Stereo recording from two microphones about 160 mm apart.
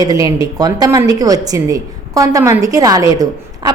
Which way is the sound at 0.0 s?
25° right (ahead or behind).